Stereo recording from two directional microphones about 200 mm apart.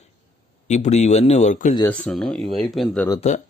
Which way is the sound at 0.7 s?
35° left (ahead or behind).